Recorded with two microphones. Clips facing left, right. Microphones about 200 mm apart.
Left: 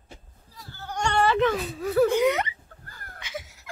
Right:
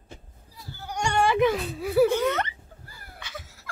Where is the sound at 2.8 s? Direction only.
10° right (ahead or behind).